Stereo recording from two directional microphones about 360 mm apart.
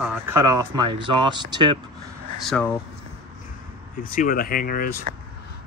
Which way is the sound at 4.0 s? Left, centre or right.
Left.